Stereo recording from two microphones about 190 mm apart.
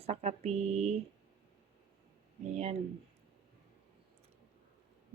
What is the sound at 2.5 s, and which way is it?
Speech, 35° right (ahead or behind).